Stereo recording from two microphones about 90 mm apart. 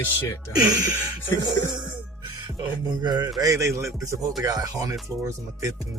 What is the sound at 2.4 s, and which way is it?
Music, 55° right (ahead or behind).